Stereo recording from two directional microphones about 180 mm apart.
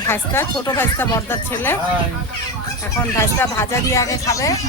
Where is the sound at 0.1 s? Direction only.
15° left (ahead or behind).